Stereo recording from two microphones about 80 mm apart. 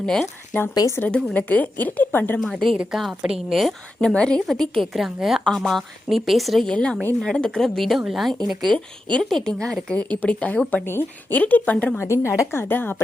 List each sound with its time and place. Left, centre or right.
0.0 s speech: centre
0.7 s speech: left
0.9 s a woman's voice: centre
2.4 s a woman's voice: centre
4.0 s a woman's voice: centre
8.7 s speech: centre
10.8 s a woman's voice: left
11.9 s a woman's voice: left